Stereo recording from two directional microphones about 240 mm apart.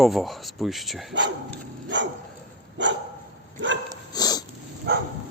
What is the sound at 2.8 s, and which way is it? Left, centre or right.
Dog, right.